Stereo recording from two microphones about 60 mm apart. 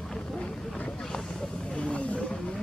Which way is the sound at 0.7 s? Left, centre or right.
Centre.